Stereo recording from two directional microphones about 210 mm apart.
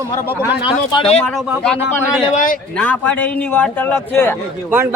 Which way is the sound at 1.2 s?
Centre (ahead or behind).